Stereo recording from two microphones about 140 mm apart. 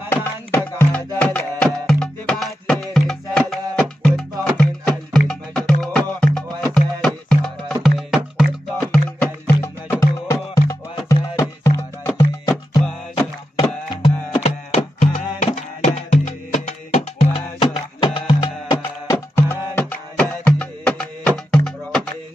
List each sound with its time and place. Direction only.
0.1 s music: 15° left (ahead or behind)
9.6 s music: 20° left (ahead or behind)
14.0 s music: 45° left (ahead or behind)
17.6 s music: 35° left (ahead or behind)
19.1 s music: 15° left (ahead or behind)